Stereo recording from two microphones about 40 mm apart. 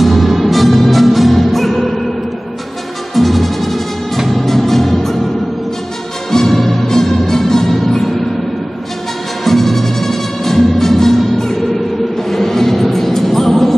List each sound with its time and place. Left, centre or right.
0.0 s music: centre
3.2 s music: centre
6.3 s music: centre
9.4 s music: centre